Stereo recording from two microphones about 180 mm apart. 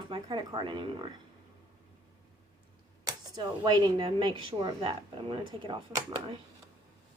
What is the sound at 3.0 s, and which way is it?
Speech, 20° right (ahead or behind).